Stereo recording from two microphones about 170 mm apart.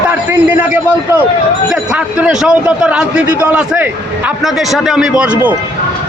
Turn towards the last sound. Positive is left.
turn(degrees=-10)  # may be behind; listen again after turning